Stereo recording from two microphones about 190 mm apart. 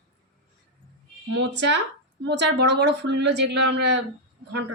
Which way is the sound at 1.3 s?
70° right (ahead or behind).